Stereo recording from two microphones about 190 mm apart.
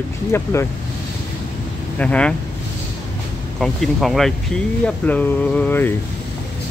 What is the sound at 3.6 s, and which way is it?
Speech, centre (ahead or behind).